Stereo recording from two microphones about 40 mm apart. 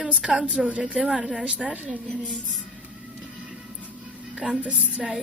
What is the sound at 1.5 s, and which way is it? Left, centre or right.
Speech, right.